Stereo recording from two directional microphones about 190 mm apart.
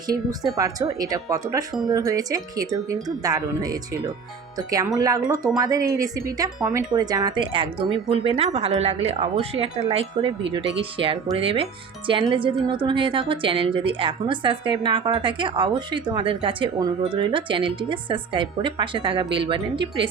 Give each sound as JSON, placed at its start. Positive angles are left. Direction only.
{"t": 0.5, "sound": "speech", "side_deg": -20}